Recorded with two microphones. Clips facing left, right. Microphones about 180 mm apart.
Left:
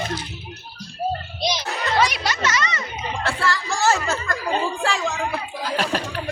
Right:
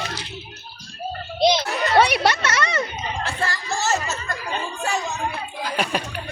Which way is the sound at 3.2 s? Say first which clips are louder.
Left 5 dB; 70° left (ahead or behind).